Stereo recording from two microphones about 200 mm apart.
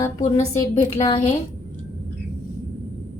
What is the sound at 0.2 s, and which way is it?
A woman's voice, 35° left (ahead or behind).